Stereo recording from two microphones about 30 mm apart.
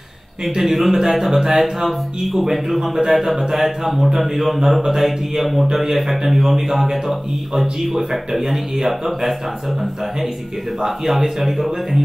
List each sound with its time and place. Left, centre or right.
0.6 s speech: centre
0.9 s a man's voice: centre
11.1 s a man's voice: centre